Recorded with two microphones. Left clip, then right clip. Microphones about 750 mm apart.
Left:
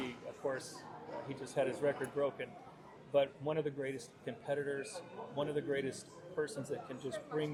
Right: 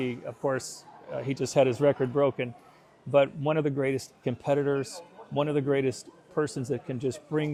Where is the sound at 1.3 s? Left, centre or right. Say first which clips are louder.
Right 13 dB; right.